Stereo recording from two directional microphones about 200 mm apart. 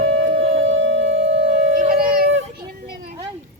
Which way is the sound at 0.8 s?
70° right (ahead or behind).